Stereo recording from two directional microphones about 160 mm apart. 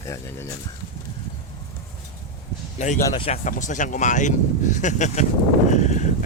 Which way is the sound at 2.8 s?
45° left (ahead or behind).